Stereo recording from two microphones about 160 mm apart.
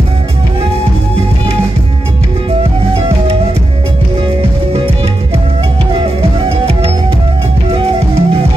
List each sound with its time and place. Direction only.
4.4 s music: 35° right (ahead or behind)
5.9 s music: 35° right (ahead or behind)